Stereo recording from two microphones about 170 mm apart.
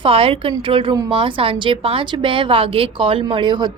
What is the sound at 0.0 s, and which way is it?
A woman's voice, 35° right (ahead or behind).